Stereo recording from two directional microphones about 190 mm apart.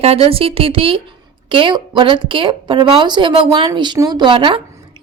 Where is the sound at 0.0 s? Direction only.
30° right (ahead or behind).